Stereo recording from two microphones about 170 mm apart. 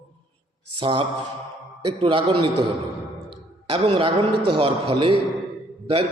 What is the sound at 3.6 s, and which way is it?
A man's voice, 35° right (ahead or behind).